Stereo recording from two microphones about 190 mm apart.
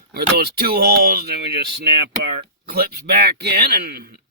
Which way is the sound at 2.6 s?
55° right (ahead or behind).